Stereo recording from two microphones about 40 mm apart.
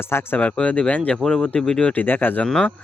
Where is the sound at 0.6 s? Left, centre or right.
Left.